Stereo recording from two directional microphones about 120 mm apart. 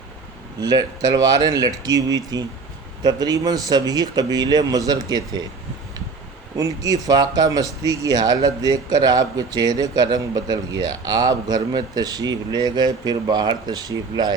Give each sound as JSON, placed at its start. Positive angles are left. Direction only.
{"t": 0.6, "sound": "speech", "side_deg": -35}
{"t": 6.6, "sound": "speech", "side_deg": -30}